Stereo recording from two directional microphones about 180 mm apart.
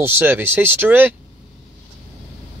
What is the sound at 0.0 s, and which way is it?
Speech, 10° right (ahead or behind).